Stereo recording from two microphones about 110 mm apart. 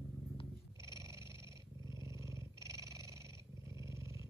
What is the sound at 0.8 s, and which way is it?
Dog, 30° right (ahead or behind).